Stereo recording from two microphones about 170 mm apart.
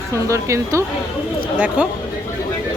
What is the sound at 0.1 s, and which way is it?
Speech, 15° right (ahead or behind).